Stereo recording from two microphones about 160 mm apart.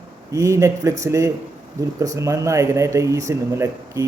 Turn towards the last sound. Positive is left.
turn(degrees=-15)  # may be behind; listen again after turning